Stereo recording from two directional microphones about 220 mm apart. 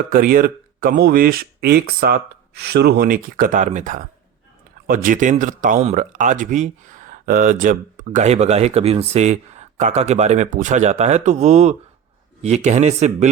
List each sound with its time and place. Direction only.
0.1 s speech: 40° right (ahead or behind)